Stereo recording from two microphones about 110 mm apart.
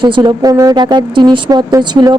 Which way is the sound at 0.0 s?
45° right (ahead or behind).